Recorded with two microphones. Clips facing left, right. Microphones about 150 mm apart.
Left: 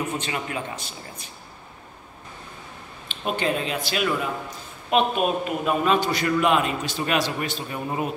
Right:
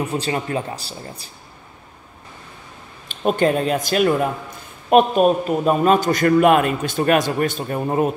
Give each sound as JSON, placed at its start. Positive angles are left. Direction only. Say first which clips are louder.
{"t": 0.1, "sound": "speech", "louder": "right 6 dB", "side_deg": -35}
{"t": 3.1, "sound": "a man's voice", "louder": "right 7 dB", "side_deg": -45}